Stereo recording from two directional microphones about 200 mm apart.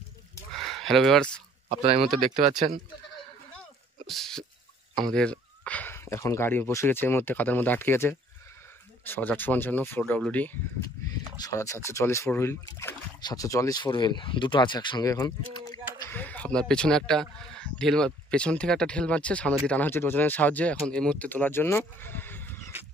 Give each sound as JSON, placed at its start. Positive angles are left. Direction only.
{"t": 0.6, "sound": "a sound", "side_deg": 0}
{"t": 1.7, "sound": "speech", "side_deg": -30}
{"t": 4.1, "sound": "speech", "side_deg": 0}
{"t": 16.1, "sound": "speech", "side_deg": 10}